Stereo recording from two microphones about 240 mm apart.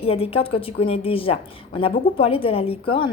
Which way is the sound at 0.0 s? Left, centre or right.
Left.